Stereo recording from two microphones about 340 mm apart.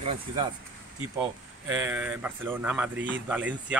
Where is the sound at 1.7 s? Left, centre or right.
Centre.